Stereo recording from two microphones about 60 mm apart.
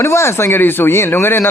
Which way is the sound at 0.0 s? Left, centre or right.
Left.